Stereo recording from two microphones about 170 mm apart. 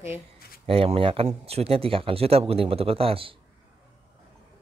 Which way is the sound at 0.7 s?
35° right (ahead or behind).